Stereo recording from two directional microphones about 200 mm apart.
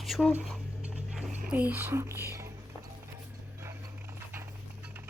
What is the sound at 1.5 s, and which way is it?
Speech, 5° right (ahead or behind).